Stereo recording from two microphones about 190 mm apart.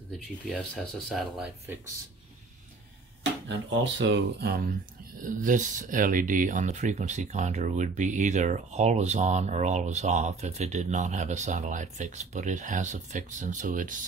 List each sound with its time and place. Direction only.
1.0 s speech: centre (ahead or behind)
3.4 s speech: 75° right (ahead or behind)
5.2 s speech: 45° right (ahead or behind)